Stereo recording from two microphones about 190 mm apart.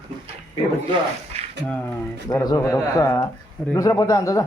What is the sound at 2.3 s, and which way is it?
Speech, 20° left (ahead or behind).